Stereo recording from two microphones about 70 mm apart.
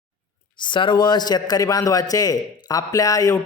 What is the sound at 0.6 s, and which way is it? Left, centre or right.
A man's voice, left.